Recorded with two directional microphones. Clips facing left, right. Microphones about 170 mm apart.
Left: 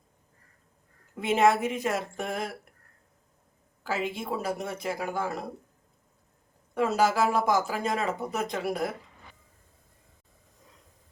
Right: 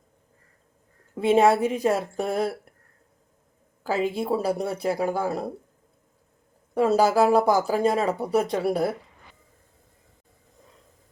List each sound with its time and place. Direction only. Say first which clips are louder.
1.1 s speech: right 5 dB; 30° right (ahead or behind)
3.8 s speech: right 6 dB; 35° right (ahead or behind)
6.7 s speech: right 5 dB; 35° right (ahead or behind)